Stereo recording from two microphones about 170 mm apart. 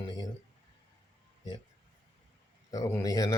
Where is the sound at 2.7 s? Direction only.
20° left (ahead or behind).